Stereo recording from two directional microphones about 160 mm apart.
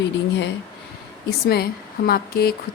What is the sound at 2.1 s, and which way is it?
Speech, 75° left (ahead or behind).